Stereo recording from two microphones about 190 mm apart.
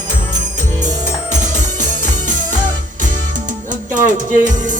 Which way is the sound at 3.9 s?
40° right (ahead or behind).